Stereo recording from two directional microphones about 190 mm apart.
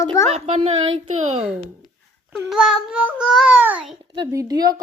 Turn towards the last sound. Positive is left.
turn(degrees=-20)  # may be behind; listen again after turning